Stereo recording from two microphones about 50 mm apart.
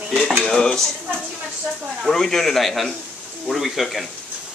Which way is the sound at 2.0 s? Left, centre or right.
Centre.